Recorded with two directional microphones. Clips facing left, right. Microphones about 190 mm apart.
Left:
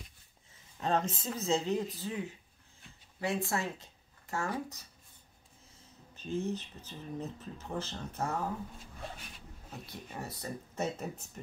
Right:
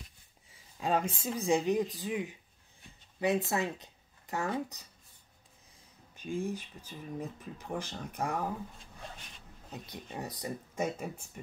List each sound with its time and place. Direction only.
0.5 s a sound: 10° right (ahead or behind)
1.2 s speech: 15° right (ahead or behind)
6.1 s speech: 10° right (ahead or behind)
9.7 s speech: 20° right (ahead or behind)